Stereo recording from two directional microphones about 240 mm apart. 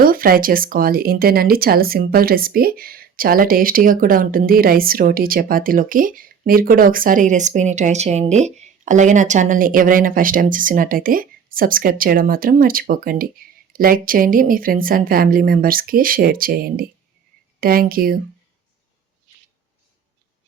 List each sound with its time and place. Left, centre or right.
0.0 s speech: right